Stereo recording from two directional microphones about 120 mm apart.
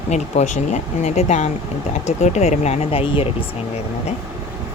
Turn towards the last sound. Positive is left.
turn(degrees=55)  # may be behind; listen again after turning